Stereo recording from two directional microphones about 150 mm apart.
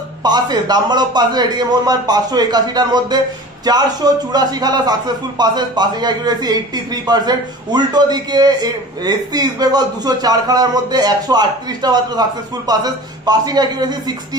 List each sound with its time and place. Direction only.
0.2 s a man's voice: 25° right (ahead or behind)